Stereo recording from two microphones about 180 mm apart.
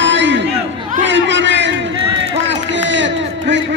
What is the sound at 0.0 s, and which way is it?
Chatter, 90° right.